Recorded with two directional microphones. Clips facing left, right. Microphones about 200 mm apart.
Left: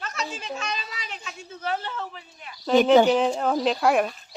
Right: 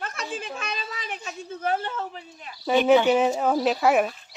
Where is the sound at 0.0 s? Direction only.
55° right (ahead or behind).